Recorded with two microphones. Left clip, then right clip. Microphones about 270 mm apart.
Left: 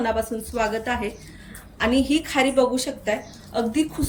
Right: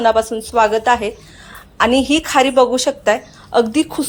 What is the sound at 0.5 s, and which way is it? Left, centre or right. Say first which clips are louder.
A woman's voice: right 12 dB; centre.